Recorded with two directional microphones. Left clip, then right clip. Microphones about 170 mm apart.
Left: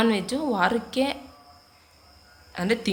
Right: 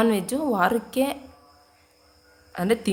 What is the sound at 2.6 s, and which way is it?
Speech, 30° right (ahead or behind).